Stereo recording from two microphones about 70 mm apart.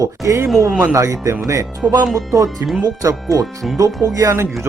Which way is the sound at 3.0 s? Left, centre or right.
Right.